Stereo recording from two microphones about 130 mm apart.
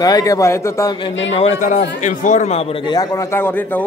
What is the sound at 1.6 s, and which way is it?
A man's voice, 80° left.